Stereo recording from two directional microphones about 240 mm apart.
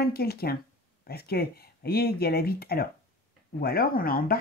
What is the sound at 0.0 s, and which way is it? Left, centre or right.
Speech, left.